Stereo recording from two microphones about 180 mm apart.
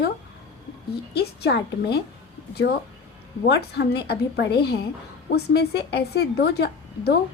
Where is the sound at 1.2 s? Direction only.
65° left (ahead or behind).